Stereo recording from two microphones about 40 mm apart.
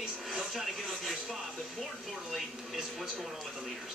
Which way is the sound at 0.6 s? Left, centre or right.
Centre.